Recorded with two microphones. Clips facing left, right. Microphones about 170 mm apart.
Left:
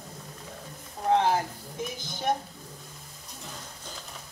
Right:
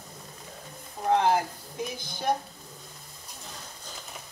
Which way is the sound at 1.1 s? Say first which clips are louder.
Even; 15° right (ahead or behind).